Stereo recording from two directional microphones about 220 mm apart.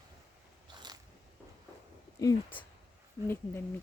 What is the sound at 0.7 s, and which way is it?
Biting, 20° right (ahead or behind).